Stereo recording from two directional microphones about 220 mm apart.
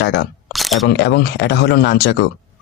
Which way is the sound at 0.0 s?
50° left (ahead or behind).